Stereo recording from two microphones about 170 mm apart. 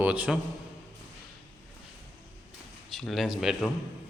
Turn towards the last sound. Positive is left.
turn(degrees=0)  # may be behind; listen again after turning